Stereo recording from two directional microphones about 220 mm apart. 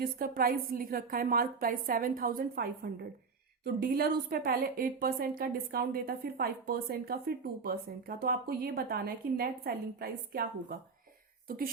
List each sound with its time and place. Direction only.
0.0 s a woman's voice: 40° right (ahead or behind)